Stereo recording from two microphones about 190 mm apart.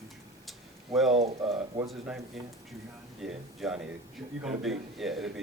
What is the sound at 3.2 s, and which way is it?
Speech, 5° right (ahead or behind).